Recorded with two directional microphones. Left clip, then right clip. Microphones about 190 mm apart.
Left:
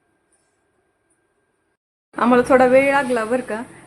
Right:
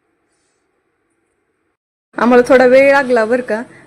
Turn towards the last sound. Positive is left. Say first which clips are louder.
# right 8 dB
turn(degrees=-20)  # may be behind; listen again after turning